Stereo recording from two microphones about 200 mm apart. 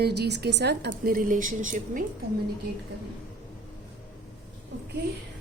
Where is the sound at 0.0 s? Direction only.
55° right (ahead or behind).